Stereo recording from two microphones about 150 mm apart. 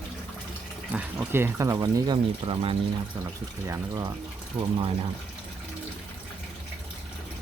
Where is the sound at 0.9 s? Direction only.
10° right (ahead or behind).